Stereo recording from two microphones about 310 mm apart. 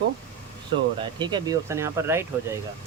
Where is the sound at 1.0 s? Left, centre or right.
Centre.